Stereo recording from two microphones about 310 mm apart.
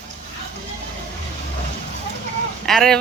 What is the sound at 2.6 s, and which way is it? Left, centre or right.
Speech, centre.